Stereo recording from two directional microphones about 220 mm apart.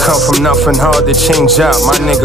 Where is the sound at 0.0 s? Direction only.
Centre (ahead or behind).